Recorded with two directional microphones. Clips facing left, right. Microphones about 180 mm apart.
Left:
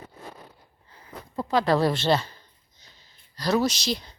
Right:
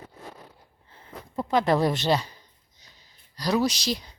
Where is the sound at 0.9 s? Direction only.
25° right (ahead or behind).